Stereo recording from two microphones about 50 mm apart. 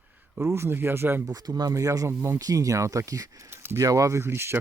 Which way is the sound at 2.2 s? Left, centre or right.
Right.